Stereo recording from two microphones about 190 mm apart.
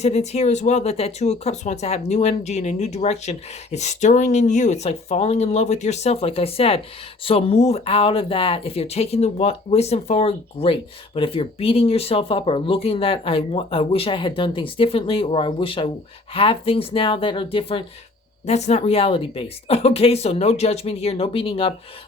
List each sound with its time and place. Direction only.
0.0 s speech: 35° left (ahead or behind)